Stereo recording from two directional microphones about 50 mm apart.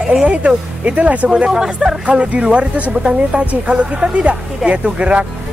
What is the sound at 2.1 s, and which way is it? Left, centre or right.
Speech, right.